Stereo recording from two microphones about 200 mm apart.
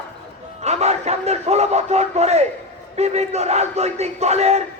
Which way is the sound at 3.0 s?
35° right (ahead or behind).